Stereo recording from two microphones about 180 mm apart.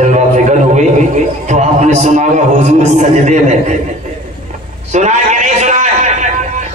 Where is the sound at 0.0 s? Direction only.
40° right (ahead or behind).